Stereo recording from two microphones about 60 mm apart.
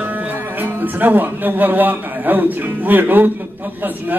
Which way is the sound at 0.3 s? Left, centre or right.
Right.